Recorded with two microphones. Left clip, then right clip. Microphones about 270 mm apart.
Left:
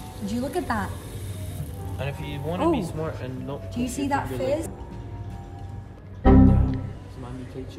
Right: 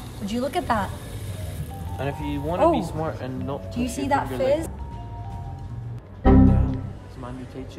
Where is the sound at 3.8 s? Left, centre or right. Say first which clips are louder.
Right 3 dB; centre.